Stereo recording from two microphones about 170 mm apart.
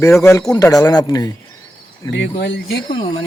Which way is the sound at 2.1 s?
90° left.